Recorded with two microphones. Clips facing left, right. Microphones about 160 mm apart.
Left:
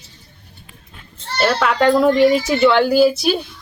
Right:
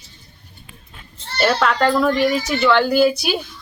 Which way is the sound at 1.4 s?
Centre (ahead or behind).